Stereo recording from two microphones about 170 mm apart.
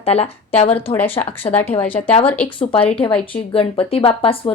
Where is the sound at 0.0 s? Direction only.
35° left (ahead or behind).